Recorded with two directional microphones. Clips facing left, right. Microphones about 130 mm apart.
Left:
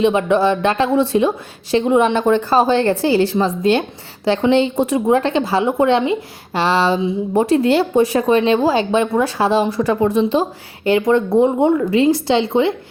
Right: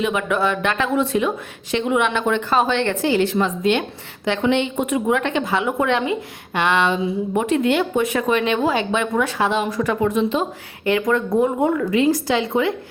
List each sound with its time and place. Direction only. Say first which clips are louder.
0.0 s a woman's voice: left 6 dB; 30° left (ahead or behind)